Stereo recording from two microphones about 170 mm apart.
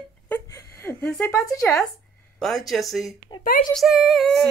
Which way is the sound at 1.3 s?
15° left (ahead or behind).